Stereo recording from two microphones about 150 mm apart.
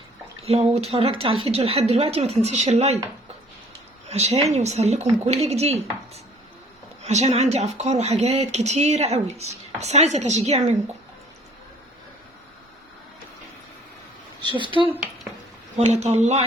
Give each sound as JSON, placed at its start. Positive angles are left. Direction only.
{"t": 0.4, "sound": "speech", "side_deg": -40}
{"t": 4.1, "sound": "speech", "side_deg": -45}
{"t": 7.0, "sound": "speech", "side_deg": -45}
{"t": 14.5, "sound": "speech", "side_deg": -35}
{"t": 15.8, "sound": "speech", "side_deg": -50}